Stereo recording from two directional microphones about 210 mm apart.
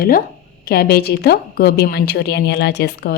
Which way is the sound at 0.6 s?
45° left (ahead or behind).